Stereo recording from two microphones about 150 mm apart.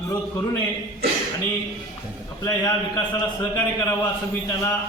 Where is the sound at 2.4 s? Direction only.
20° left (ahead or behind).